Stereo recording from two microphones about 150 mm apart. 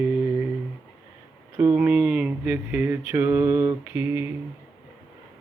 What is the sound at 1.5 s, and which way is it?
Speech, 10° right (ahead or behind).